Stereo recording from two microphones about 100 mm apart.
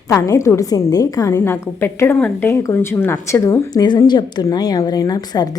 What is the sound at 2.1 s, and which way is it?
Speech, 15° left (ahead or behind).